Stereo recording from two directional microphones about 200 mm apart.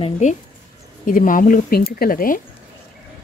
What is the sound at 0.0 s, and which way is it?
Speech, 35° left (ahead or behind).